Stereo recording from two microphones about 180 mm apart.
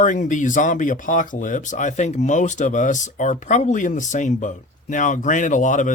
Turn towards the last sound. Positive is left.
turn(degrees=45)  # may be behind; listen again after turning